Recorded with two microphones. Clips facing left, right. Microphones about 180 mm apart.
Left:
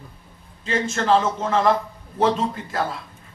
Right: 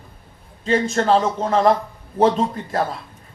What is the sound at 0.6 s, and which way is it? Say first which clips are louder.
A man's voice: right 4 dB; 35° right (ahead or behind).